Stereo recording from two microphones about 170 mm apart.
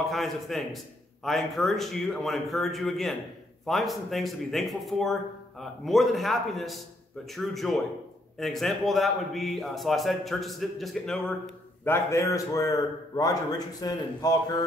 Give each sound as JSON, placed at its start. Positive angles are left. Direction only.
{"t": 0.1, "sound": "speech", "side_deg": 0}
{"t": 11.8, "sound": "a man's voice", "side_deg": 15}